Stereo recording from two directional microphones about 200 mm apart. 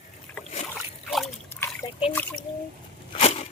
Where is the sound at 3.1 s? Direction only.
30° left (ahead or behind).